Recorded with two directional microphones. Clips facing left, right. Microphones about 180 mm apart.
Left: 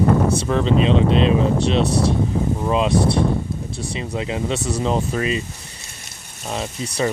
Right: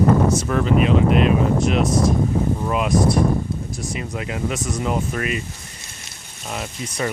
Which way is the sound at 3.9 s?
25° left (ahead or behind).